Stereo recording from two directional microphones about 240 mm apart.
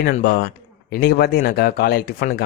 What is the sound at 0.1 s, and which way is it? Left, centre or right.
A man's voice, left.